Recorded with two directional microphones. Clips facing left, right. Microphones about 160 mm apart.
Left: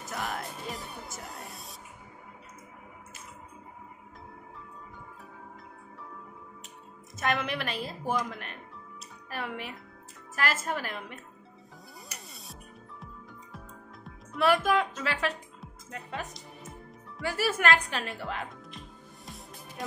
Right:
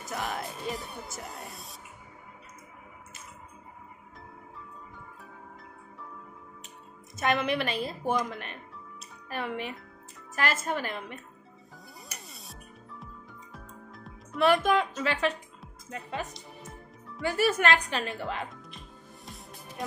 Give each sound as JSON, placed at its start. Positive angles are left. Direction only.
{"t": 0.1, "sound": "music", "side_deg": 0}
{"t": 7.2, "sound": "a woman's voice", "side_deg": 0}
{"t": 12.3, "sound": "music", "side_deg": 0}
{"t": 17.2, "sound": "a woman's voice", "side_deg": 5}
{"t": 19.2, "sound": "music", "side_deg": 0}